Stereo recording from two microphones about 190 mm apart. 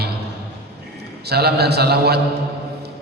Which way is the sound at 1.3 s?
55° right (ahead or behind).